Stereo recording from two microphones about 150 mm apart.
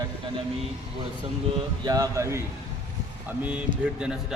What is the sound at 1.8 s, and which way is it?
Speech, 25° right (ahead or behind).